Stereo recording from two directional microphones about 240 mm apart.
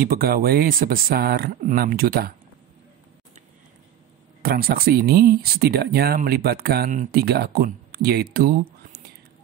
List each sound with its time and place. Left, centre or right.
0.0 s speech: right
4.4 s speech: right